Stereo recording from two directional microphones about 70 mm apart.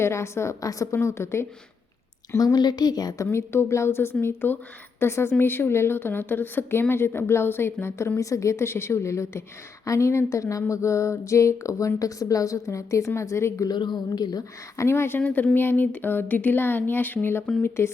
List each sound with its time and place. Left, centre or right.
0.0 s a sound: left
0.9 s a woman's voice: left
2.4 s a woman's voice: left
3.3 s a woman's voice: left
9.8 s a sound: left
13.7 s speech: left
14.8 s a woman's voice: left
15.2 s a woman's voice: left